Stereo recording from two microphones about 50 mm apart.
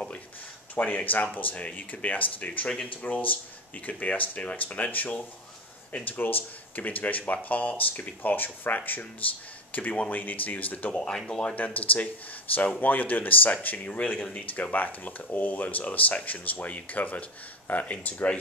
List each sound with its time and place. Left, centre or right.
0.7 s speech: left
3.1 s speech: left
11.1 s speech: centre
11.5 s speech: left
14.1 s speech: centre
14.5 s speech: left